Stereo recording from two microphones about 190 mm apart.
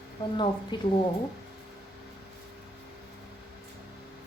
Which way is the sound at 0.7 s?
25° left (ahead or behind).